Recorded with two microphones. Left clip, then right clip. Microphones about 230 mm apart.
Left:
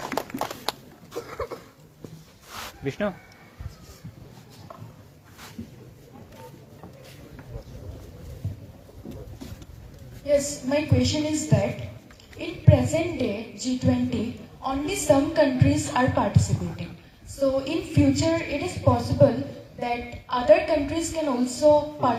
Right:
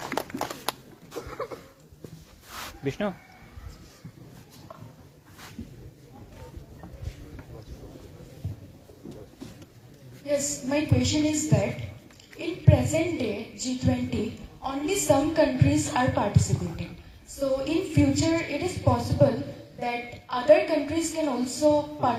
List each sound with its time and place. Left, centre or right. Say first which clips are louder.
0.3 s a sound: left 2 dB; centre
1.1 s cough: left 2 dB; left
2.8 s speech: left 2 dB; centre
10.2 s a woman's voice: left 5 dB; centre